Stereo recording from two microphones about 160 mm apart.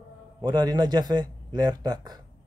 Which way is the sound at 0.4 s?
25° right (ahead or behind).